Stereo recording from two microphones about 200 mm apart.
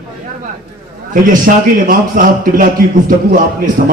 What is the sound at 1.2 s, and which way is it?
A man's voice, 45° right (ahead or behind).